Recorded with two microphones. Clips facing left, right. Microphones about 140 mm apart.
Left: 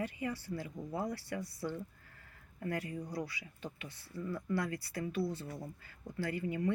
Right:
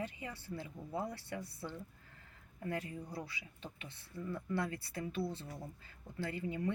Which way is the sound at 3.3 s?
25° right (ahead or behind).